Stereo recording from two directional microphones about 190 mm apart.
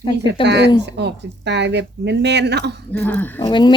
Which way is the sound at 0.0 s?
25° left (ahead or behind).